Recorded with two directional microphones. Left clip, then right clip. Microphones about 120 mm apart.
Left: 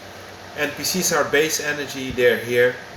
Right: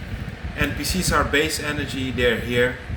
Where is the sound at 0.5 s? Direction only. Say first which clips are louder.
Left 1 dB; 45° right (ahead or behind).